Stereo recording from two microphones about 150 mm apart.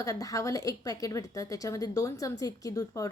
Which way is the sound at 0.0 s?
25° left (ahead or behind).